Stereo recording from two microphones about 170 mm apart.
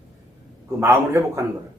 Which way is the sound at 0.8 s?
15° right (ahead or behind).